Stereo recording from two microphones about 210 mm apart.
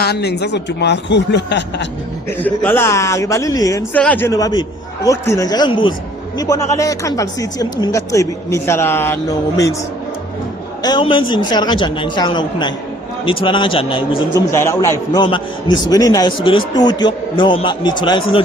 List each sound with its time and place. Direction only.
0.0 s speech: 50° left (ahead or behind)
2.4 s a man's voice: 10° left (ahead or behind)
10.8 s a man's voice: 20° left (ahead or behind)
14.5 s a man's voice: 15° left (ahead or behind)